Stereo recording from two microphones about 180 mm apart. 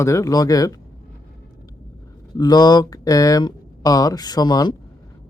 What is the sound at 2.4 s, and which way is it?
Speech, 20° left (ahead or behind).